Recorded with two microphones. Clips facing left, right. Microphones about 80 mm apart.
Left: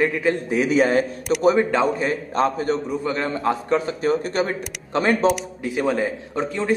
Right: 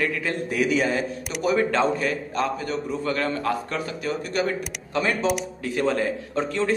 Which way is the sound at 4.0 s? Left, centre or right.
Left.